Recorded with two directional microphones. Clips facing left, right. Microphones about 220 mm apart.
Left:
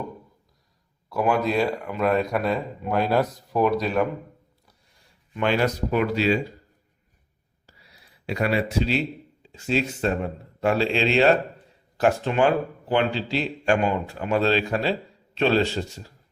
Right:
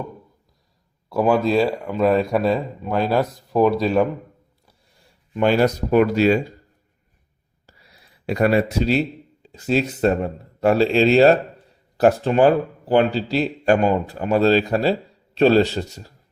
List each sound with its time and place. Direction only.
1.1 s a man's voice: 30° right (ahead or behind)
5.4 s speech: 40° right (ahead or behind)
8.3 s a man's voice: 45° right (ahead or behind)